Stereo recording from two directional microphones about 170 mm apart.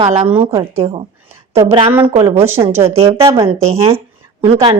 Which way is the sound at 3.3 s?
35° right (ahead or behind).